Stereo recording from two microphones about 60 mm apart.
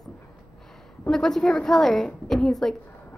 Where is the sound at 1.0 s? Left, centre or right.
Centre.